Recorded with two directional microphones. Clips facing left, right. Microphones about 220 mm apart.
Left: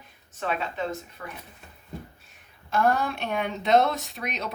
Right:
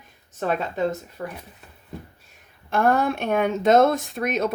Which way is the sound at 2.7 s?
55° right (ahead or behind).